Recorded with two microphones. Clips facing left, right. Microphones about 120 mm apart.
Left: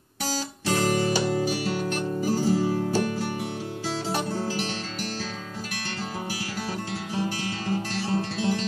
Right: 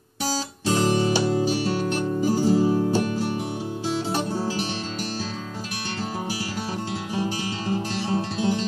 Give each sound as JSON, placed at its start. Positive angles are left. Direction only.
{"t": 0.7, "sound": "music", "side_deg": -25}
{"t": 2.2, "sound": "music", "side_deg": -20}
{"t": 8.1, "sound": "music", "side_deg": -20}